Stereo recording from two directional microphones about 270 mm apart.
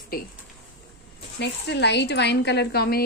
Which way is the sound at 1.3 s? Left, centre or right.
Left.